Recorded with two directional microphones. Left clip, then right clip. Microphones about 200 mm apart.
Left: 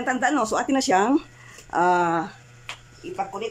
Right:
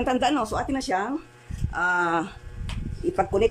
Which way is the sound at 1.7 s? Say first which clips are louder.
Left 4 dB; 25° left (ahead or behind).